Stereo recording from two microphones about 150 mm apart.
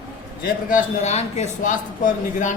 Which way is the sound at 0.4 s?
60° left (ahead or behind).